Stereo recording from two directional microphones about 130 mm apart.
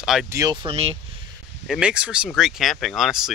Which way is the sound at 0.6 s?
50° right (ahead or behind).